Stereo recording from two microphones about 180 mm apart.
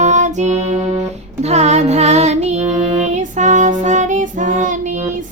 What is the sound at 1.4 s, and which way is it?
Child singing, 35° right (ahead or behind).